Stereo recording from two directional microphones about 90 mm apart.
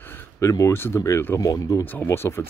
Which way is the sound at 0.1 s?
35° left (ahead or behind).